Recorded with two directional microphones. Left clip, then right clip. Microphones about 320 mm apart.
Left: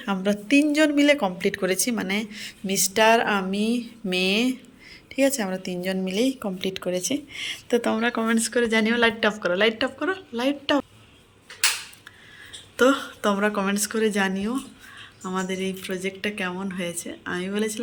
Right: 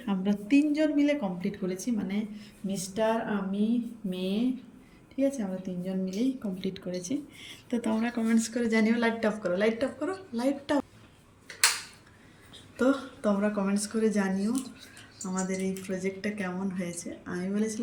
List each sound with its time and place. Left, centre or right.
0.0 s speech: centre
3.0 s a woman's voice: left
3.5 s a woman's voice: centre
5.1 s a woman's voice: left
6.1 s speech: centre
12.7 s speech: centre